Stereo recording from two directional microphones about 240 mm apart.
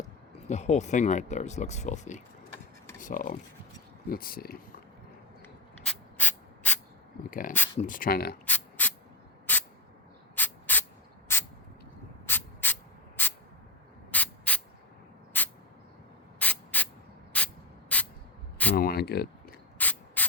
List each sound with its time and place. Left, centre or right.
0.4 s speech: left
5.8 s spray: centre
7.3 s speech: left
8.4 s a sound: centre
9.5 s spray: centre
15.3 s a sound: centre
16.4 s spray: centre
18.8 s a sound: left
19.8 s spray: centre